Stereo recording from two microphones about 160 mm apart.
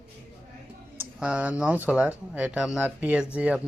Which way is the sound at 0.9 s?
5° right (ahead or behind).